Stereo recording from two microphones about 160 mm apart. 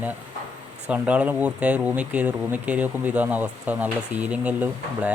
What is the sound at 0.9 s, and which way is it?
Speech, 10° right (ahead or behind).